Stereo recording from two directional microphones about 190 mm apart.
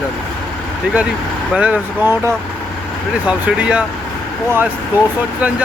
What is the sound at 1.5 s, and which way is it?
Speech, 5° right (ahead or behind).